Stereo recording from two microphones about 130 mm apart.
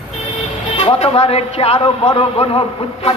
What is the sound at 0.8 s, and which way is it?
A man's voice, 45° left (ahead or behind).